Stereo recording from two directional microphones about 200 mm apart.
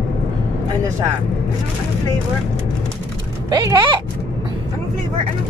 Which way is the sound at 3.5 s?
20° right (ahead or behind).